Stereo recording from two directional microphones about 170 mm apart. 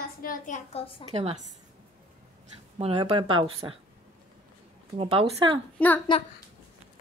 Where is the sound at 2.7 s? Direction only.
35° right (ahead or behind).